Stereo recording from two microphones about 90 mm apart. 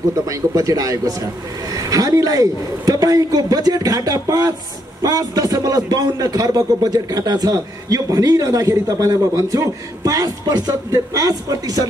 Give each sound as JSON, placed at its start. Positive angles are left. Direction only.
{"t": 0.3, "sound": "a man's voice", "side_deg": -40}